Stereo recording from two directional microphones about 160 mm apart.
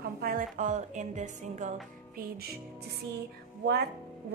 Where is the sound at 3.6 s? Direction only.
90° right.